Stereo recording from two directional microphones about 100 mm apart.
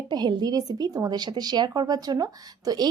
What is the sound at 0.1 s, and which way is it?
A woman's voice, 45° right (ahead or behind).